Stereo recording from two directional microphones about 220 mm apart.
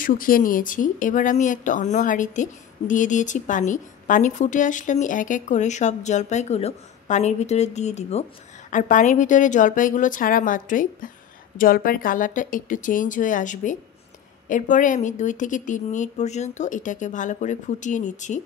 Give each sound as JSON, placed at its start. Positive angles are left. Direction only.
{"t": 0.0, "sound": "speech", "side_deg": 40}